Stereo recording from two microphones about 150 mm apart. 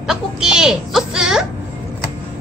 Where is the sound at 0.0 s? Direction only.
5° right (ahead or behind).